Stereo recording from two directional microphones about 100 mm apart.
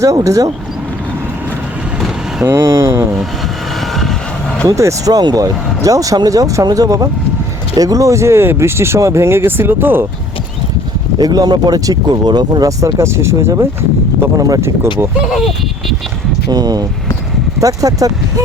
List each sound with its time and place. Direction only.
0.0 s speech: 35° right (ahead or behind)
2.4 s speech: 25° right (ahead or behind)
4.6 s speech: 30° right (ahead or behind)
11.2 s speech: 40° right (ahead or behind)
12.8 s speech: 30° right (ahead or behind)
15.3 s a sound: centre (ahead or behind)
16.5 s speech: 40° right (ahead or behind)